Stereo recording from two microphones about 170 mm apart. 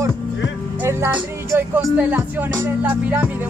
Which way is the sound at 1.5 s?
10° right (ahead or behind).